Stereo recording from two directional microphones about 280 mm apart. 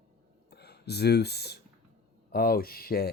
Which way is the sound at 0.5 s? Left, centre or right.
Left.